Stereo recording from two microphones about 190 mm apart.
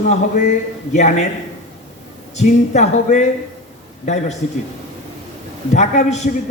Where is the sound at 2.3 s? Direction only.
35° left (ahead or behind).